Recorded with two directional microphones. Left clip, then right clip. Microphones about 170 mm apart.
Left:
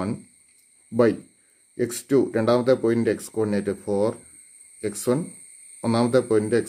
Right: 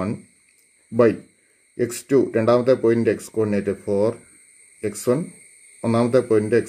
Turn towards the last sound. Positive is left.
turn(degrees=-15)  # may be behind; listen again after turning